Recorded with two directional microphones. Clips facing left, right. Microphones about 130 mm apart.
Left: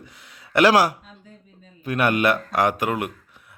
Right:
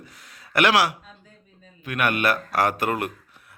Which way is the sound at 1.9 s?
30° left (ahead or behind).